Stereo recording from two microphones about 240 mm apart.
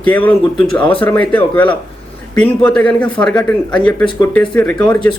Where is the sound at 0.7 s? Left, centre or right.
Left.